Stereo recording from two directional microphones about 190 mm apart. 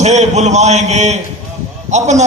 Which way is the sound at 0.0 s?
35° right (ahead or behind).